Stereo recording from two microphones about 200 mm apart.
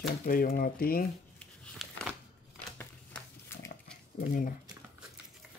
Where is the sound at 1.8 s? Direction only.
Centre (ahead or behind).